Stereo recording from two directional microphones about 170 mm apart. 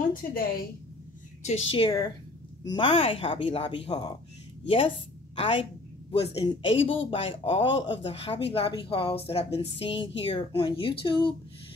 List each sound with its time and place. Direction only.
0.1 s a woman's voice: 60° left (ahead or behind)
1.4 s a woman's voice: 35° left (ahead or behind)